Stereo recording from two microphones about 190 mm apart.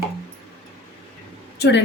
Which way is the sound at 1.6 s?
65° left (ahead or behind).